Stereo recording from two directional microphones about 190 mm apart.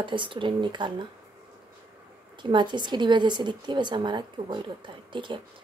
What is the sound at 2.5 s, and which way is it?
A woman's voice, 25° right (ahead or behind).